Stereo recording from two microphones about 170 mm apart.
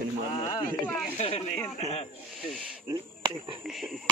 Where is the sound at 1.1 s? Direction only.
35° left (ahead or behind).